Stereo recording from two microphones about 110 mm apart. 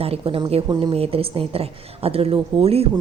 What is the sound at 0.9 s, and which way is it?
A woman's voice, 60° right (ahead or behind).